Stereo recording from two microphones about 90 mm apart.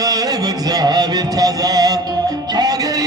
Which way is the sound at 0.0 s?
45° right (ahead or behind).